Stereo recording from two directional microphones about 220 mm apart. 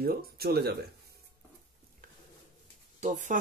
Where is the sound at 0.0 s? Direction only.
45° right (ahead or behind).